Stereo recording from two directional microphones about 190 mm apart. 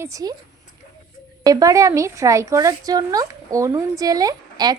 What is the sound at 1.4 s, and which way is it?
A woman's voice, 20° right (ahead or behind).